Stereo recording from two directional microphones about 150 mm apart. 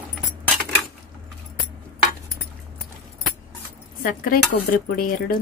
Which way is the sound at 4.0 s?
75° left (ahead or behind).